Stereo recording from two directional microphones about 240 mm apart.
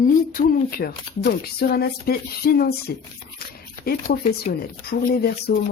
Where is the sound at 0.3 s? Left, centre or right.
Left.